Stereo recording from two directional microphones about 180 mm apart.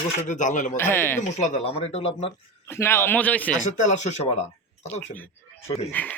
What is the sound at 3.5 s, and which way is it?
Speech, 45° left (ahead or behind).